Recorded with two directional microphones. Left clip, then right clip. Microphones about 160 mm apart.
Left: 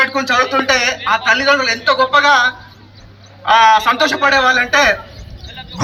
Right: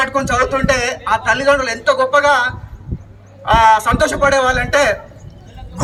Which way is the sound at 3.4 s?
50° right (ahead or behind).